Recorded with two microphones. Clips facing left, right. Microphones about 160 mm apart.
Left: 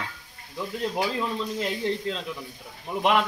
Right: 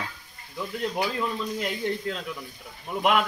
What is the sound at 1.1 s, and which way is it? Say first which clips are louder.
Speech: left 1 dB; 25° left (ahead or behind).